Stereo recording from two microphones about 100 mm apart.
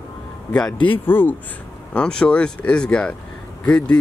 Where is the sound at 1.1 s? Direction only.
20° left (ahead or behind).